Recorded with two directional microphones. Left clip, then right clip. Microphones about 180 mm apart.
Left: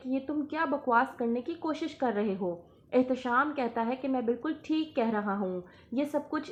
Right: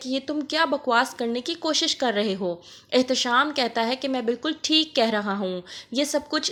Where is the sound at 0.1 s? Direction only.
25° right (ahead or behind).